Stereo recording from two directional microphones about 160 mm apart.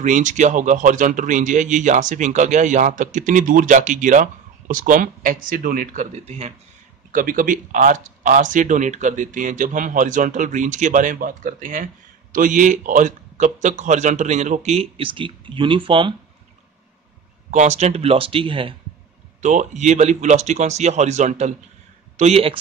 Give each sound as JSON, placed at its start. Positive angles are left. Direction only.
{"t": 0.0, "sound": "speech", "side_deg": -50}
{"t": 7.1, "sound": "speech", "side_deg": -55}
{"t": 17.5, "sound": "speech", "side_deg": -45}
{"t": 19.4, "sound": "speech", "side_deg": -50}